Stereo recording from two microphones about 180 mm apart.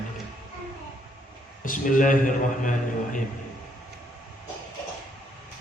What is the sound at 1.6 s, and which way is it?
A man's voice, 45° left (ahead or behind).